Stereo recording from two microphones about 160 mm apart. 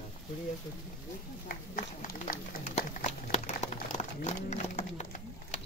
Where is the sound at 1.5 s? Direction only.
60° left (ahead or behind).